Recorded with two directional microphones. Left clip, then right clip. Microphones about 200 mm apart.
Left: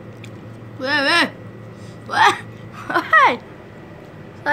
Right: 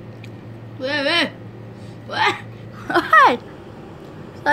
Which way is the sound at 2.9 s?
15° right (ahead or behind).